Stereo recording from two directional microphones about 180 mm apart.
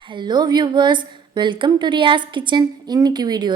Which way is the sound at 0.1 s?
25° right (ahead or behind).